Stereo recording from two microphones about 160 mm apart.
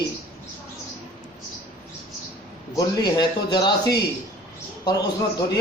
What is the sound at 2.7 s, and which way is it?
A man's voice, 25° left (ahead or behind).